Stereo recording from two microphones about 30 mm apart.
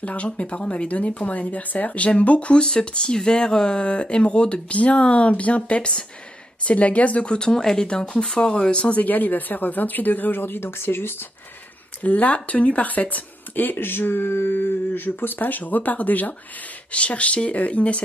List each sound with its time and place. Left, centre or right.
0.0 s speech: left
2.5 s speech: left
5.3 s speech: left
5.8 s speech: left
6.6 s speech: left
7.2 s speech: left
8.9 s speech: left
12.0 s speech: left
16.9 s speech: left